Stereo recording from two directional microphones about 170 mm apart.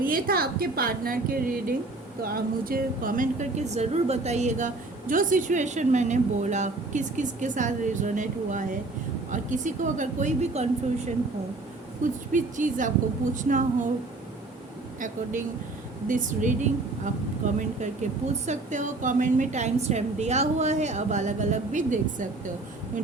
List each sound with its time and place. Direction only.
0.0 s a woman's voice: 60° right (ahead or behind); by 11.1 s 40° right (ahead or behind)
12.3 s speech: 50° right (ahead or behind)
15.0 s speech: 50° right (ahead or behind)